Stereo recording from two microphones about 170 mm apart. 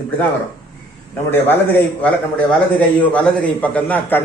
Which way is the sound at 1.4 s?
10° left (ahead or behind).